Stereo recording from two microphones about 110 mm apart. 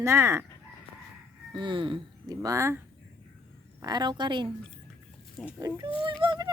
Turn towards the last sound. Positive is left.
turn(degrees=-50)  # may be behind; listen again after turning